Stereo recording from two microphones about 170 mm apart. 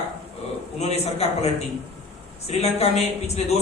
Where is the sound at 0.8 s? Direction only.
40° left (ahead or behind).